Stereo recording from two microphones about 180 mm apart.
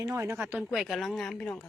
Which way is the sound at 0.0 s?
15° right (ahead or behind).